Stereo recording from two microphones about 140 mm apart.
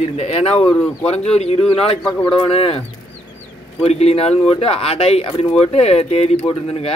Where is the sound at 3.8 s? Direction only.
45° left (ahead or behind).